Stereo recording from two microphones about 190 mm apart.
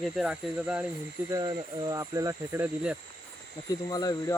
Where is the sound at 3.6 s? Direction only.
25° left (ahead or behind).